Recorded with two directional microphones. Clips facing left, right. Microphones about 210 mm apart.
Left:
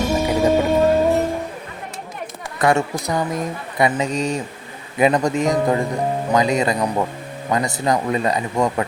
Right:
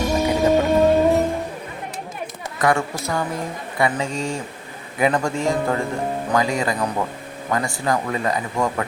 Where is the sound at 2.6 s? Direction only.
25° left (ahead or behind).